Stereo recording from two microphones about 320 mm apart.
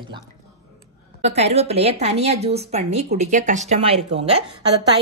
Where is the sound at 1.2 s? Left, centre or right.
Centre.